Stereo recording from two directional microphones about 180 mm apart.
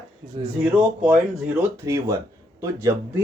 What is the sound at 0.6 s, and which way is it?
A man's voice, 10° right (ahead or behind).